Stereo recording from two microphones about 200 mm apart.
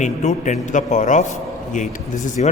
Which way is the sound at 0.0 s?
35° left (ahead or behind).